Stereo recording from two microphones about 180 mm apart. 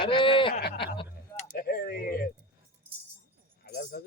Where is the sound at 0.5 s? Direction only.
65° left (ahead or behind).